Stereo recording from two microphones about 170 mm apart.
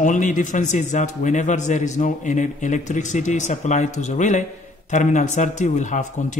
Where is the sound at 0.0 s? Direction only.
50° left (ahead or behind).